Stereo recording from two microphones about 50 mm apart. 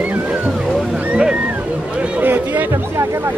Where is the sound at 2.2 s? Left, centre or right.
Right.